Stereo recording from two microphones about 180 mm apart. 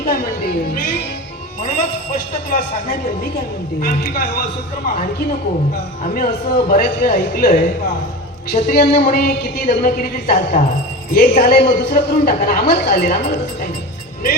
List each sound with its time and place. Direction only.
0.0 s music: 55° left (ahead or behind)
2.5 s speech: 50° left (ahead or behind)
6.0 s a man's voice: 50° left (ahead or behind)